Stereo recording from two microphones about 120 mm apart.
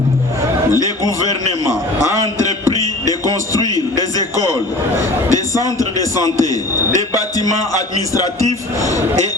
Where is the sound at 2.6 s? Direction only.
30° left (ahead or behind).